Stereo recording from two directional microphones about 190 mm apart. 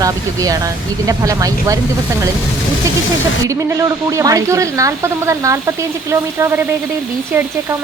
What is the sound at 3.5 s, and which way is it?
Speech, 15° right (ahead or behind).